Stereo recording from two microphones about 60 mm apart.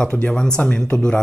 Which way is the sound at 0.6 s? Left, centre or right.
Left.